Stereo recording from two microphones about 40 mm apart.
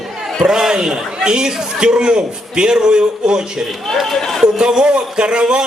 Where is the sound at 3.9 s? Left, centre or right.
Centre.